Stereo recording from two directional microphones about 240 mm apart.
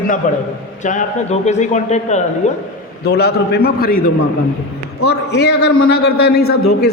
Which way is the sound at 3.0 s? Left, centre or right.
Left.